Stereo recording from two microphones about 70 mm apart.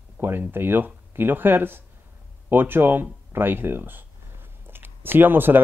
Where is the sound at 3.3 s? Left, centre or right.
Right.